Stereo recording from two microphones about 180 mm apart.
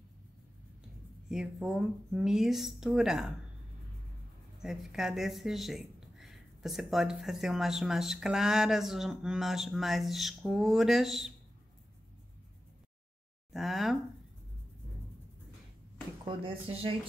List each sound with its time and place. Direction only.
1.3 s speech: centre (ahead or behind)
4.6 s speech: centre (ahead or behind)
13.5 s speech: centre (ahead or behind)
16.3 s speech: 30° right (ahead or behind)